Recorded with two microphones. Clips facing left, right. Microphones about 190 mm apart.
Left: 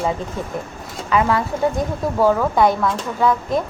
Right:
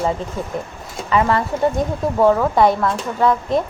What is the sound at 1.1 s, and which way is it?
A woman's voice, 5° left (ahead or behind).